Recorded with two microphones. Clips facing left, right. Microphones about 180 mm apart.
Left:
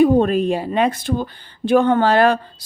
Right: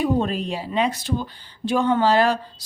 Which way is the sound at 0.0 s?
55° left (ahead or behind).